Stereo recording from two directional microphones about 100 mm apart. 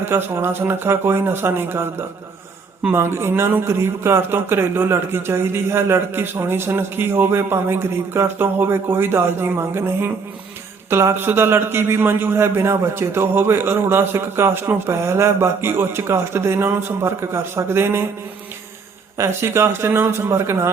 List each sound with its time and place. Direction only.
0.0 s a man's voice: 25° right (ahead or behind)
19.1 s a man's voice: 30° right (ahead or behind)